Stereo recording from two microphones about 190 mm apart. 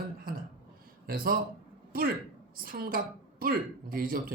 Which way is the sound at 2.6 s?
50° right (ahead or behind).